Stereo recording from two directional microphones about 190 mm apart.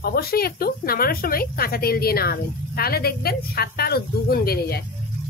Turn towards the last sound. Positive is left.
turn(degrees=55)  # may be behind; listen again after turning